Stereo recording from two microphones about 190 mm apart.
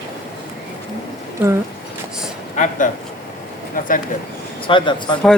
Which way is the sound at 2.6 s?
45° left (ahead or behind).